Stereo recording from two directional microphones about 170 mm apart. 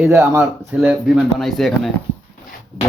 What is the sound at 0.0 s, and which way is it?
Speech, 15° right (ahead or behind).